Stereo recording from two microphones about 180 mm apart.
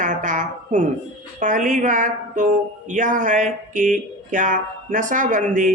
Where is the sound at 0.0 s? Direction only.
45° right (ahead or behind).